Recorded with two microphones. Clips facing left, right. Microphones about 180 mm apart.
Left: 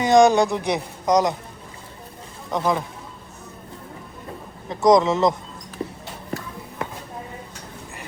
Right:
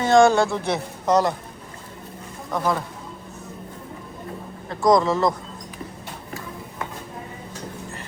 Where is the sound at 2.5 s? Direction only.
20° left (ahead or behind).